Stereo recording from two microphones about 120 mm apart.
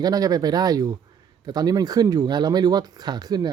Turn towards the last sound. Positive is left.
turn(degrees=-35)  # may be behind; listen again after turning